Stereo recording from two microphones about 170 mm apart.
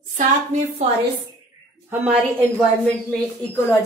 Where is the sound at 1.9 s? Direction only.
10° right (ahead or behind).